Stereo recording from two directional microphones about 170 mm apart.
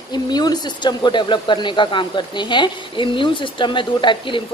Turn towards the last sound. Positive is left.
turn(degrees=30)  # may be behind; listen again after turning